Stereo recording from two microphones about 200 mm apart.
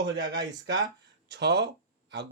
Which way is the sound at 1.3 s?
60° right (ahead or behind).